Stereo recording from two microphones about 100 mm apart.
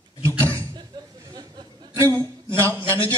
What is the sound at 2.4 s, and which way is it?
Speech, 25° right (ahead or behind).